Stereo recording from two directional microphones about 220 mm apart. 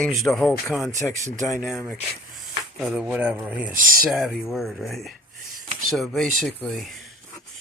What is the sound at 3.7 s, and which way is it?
Speech, 40° right (ahead or behind).